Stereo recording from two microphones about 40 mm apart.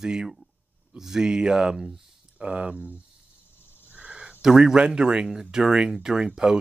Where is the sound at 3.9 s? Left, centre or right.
Right.